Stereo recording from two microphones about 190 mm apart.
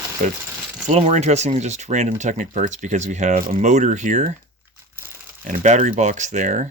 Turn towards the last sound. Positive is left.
turn(degrees=-40)  # may be behind; listen again after turning